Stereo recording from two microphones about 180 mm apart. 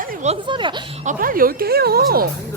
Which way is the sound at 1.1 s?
50° right (ahead or behind).